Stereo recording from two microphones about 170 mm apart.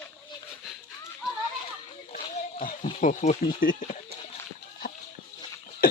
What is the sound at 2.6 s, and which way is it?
Speech, 50° left (ahead or behind).